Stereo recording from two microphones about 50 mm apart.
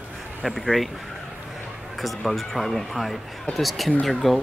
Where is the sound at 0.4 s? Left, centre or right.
Centre.